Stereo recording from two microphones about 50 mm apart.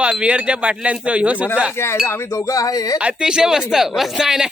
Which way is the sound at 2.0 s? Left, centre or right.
Left.